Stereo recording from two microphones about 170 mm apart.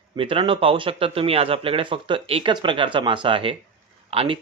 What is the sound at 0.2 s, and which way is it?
A man's voice, 30° right (ahead or behind).